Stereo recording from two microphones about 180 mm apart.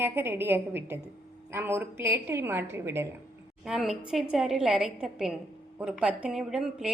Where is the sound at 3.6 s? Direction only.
Centre (ahead or behind).